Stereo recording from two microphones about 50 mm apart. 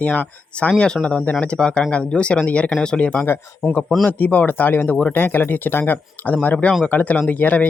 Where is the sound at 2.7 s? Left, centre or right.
Centre.